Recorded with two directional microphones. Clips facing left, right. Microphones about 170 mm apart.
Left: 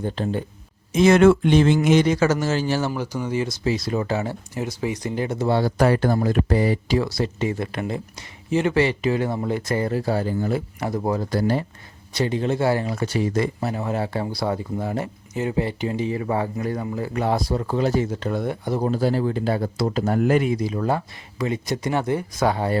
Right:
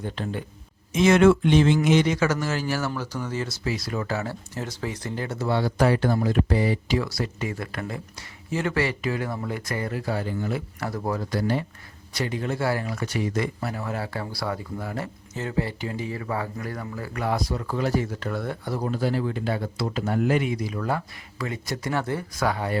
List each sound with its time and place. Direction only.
0.0 s speech: 35° left (ahead or behind)
2.9 s speech: 15° left (ahead or behind)
5.5 s speech: 40° left (ahead or behind)
10.8 s speech: 20° left (ahead or behind); by 11.6 s 40° left (ahead or behind)
12.1 s speech: 25° left (ahead or behind)
18.9 s speech: 35° left (ahead or behind)
20.6 s speech: 30° left (ahead or behind)